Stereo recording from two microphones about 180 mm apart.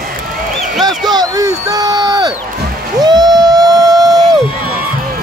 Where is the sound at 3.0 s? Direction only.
20° right (ahead or behind).